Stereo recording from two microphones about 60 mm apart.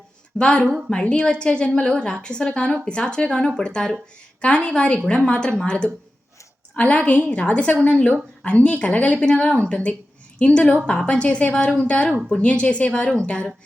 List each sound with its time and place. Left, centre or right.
0.3 s a woman's voice: centre